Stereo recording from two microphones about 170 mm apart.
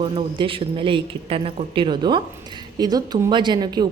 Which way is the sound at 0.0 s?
30° right (ahead or behind).